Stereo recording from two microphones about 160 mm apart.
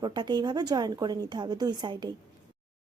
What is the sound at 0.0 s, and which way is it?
Speech, 25° right (ahead or behind).